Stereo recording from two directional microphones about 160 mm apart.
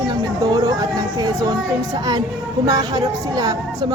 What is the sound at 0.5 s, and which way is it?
Vehicle, 25° right (ahead or behind).